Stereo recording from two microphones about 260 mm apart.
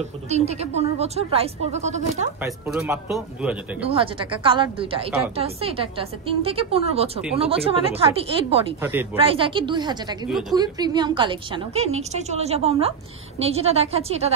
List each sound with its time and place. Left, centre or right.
0.0 s a woman's voice: right
2.4 s a man's voice: centre
3.8 s a woman's voice: right